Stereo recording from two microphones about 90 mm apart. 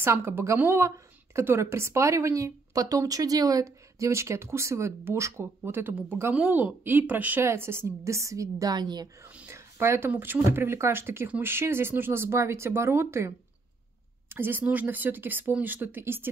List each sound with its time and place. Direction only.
0.0 s speech: 25° right (ahead or behind); by 9.1 s 50° right (ahead or behind)
9.5 s speech: 30° right (ahead or behind)
14.3 s speech: 25° right (ahead or behind)